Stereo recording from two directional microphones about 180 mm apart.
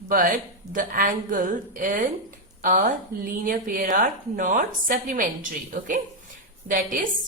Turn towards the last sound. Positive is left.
turn(degrees=-50)  # may be behind; listen again after turning